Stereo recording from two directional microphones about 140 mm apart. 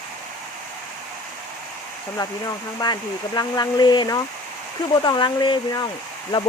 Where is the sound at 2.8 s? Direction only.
30° left (ahead or behind).